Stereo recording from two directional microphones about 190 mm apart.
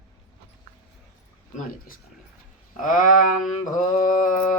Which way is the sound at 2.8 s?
45° left (ahead or behind).